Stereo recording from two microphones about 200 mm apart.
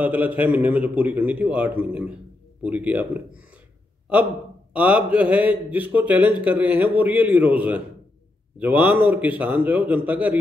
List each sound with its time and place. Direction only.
0.0 s a man's voice: 10° right (ahead or behind)
4.7 s a man's voice: 5° right (ahead or behind)
6.1 s speech: 25° left (ahead or behind)
6.4 s a man's voice: 10° right (ahead or behind)